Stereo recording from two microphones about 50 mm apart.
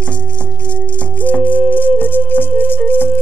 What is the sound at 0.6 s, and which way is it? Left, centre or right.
Music, left.